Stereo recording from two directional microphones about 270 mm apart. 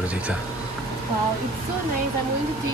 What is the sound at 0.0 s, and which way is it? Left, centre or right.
Speech, centre.